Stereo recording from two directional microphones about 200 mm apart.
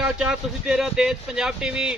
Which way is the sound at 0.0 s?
5° right (ahead or behind).